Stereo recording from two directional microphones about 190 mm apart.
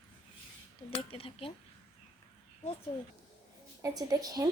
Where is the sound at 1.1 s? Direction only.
30° left (ahead or behind).